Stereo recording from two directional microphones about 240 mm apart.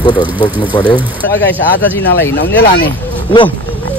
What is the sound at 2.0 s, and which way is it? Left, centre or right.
Speech, left.